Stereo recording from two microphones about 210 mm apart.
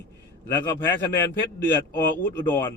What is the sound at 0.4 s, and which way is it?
Speech, 10° left (ahead or behind).